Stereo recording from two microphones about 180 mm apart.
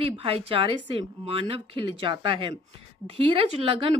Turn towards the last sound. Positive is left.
turn(degrees=-30)  # may be behind; listen again after turning